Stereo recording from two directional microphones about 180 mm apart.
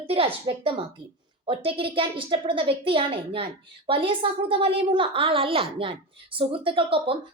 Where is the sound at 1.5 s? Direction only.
30° right (ahead or behind).